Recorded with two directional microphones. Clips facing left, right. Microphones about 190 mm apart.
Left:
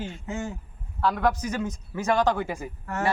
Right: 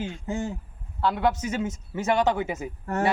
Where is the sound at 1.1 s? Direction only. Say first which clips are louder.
Right 1 dB; 25° right (ahead or behind).